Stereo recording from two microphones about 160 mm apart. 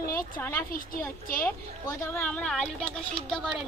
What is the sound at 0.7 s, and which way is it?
Speech, 60° left (ahead or behind).